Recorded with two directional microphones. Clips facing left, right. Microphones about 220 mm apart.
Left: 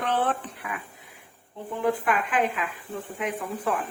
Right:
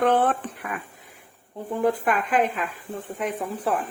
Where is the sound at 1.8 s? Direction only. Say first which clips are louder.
Right 2 dB; 40° right (ahead or behind).